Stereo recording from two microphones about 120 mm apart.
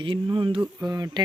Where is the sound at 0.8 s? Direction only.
35° right (ahead or behind).